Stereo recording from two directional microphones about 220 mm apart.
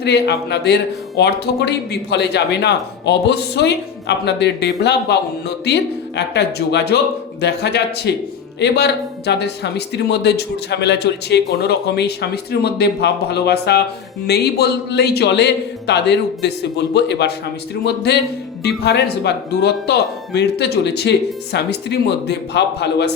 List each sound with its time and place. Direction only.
0.0 s speech: 50° left (ahead or behind)